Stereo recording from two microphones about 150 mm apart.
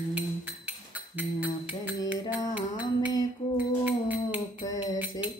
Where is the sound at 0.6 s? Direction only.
10° right (ahead or behind).